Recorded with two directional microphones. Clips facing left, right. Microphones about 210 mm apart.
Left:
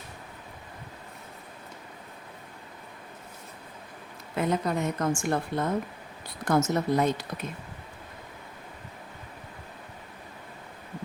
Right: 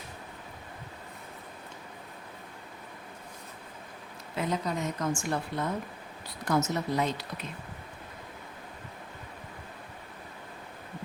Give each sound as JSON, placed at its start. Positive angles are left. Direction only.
{"t": 4.4, "sound": "a woman's voice", "side_deg": 55}